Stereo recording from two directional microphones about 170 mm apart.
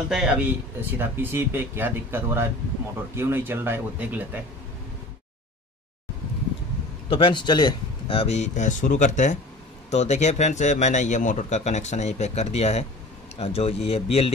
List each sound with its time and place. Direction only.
0.1 s speech: 5° right (ahead or behind)
7.1 s speech: 30° left (ahead or behind)